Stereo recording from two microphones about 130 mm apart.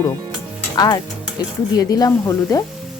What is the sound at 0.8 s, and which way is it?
Speech, 30° left (ahead or behind).